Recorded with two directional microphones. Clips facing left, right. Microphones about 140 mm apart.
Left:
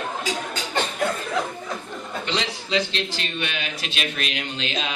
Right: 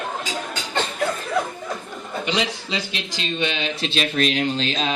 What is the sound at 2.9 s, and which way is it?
A man's voice, 15° right (ahead or behind).